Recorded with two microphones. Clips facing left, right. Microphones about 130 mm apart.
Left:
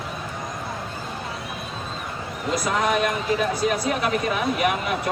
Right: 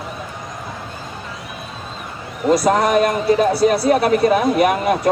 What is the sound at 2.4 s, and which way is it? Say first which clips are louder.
A man's voice: right 8 dB; 40° right (ahead or behind).